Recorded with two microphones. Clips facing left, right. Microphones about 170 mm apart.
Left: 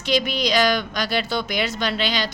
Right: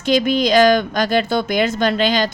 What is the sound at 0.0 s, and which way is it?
Speech, 45° right (ahead or behind).